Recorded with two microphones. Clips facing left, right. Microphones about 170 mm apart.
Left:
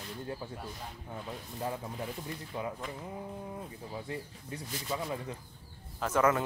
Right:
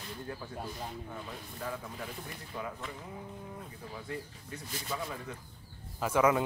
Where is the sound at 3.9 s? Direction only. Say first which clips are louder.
Even; 25° left (ahead or behind).